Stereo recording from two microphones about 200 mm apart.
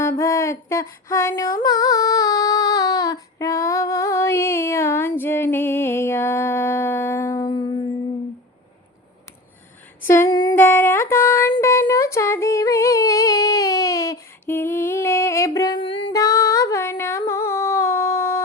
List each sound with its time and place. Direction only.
0.0 s female singing: 15° left (ahead or behind)
10.0 s a sound: 10° left (ahead or behind)
16.0 s female singing: 15° left (ahead or behind)